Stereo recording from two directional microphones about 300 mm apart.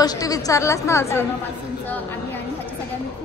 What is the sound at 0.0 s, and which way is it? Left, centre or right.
A woman's voice, centre.